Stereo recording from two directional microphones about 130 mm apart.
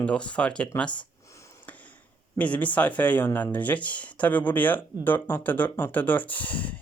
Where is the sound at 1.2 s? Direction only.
25° left (ahead or behind).